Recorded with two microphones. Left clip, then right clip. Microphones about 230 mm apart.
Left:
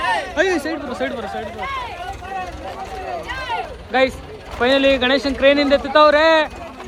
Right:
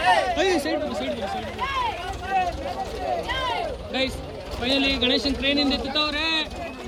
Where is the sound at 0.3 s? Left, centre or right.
Left.